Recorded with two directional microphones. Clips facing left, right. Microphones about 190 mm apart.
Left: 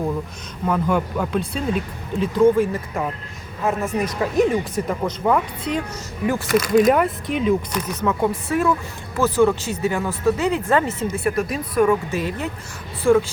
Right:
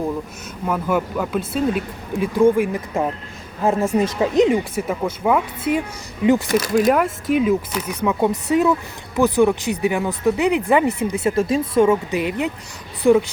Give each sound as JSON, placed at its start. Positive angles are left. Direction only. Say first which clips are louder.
{"t": 0.6, "sound": "speech", "louder": "even", "side_deg": -5}
{"t": 3.6, "sound": "speech", "louder": "right 4 dB", "side_deg": -30}
{"t": 4.7, "sound": "speech", "louder": "right 1 dB", "side_deg": -10}
{"t": 6.2, "sound": "speech", "louder": "right 4 dB", "side_deg": -20}
{"t": 6.7, "sound": "speech", "louder": "left 2 dB", "side_deg": 0}